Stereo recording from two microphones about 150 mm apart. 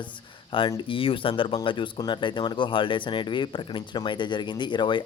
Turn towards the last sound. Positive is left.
turn(degrees=30)  # may be behind; listen again after turning